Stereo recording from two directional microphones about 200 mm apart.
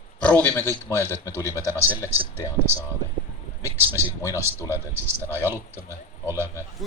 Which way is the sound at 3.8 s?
10° right (ahead or behind).